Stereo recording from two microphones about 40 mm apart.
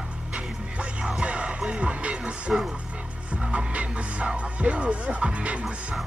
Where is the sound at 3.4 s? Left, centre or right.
Right.